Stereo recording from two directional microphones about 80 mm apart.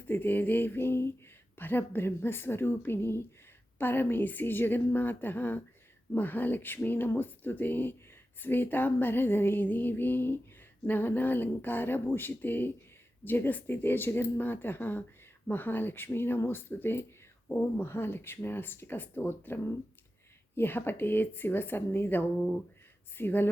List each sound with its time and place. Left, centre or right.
0.1 s speech: left